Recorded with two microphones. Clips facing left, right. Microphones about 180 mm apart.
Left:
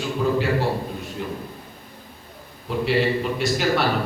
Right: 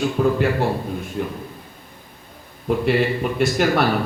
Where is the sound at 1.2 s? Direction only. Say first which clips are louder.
Right 4 dB; 50° right (ahead or behind).